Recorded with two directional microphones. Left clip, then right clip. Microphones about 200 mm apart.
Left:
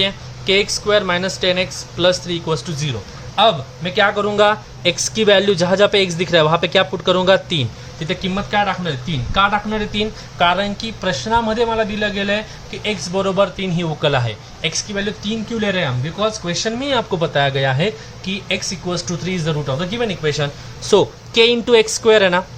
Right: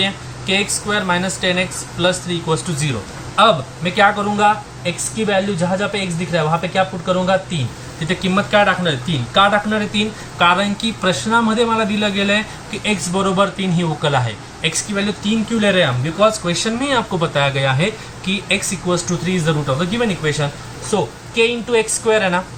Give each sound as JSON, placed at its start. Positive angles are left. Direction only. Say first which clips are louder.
{"t": 0.0, "sound": "speech", "louder": "left 1 dB", "side_deg": 50}
{"t": 8.0, "sound": "speech", "louder": "right 4 dB", "side_deg": 40}